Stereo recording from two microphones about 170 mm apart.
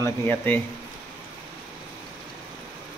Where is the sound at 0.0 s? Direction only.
10° left (ahead or behind).